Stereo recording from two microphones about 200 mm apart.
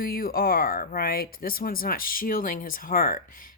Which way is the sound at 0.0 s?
50° left (ahead or behind).